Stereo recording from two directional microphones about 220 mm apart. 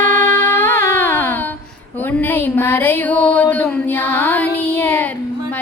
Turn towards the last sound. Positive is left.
turn(degrees=5)  # may be behind; listen again after turning